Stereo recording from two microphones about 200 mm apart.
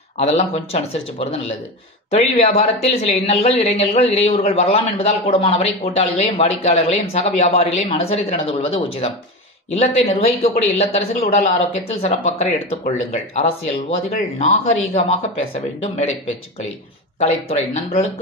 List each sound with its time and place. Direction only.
0.2 s speech: 30° left (ahead or behind)
15.0 s speech: 30° left (ahead or behind)
17.2 s speech: 30° left (ahead or behind)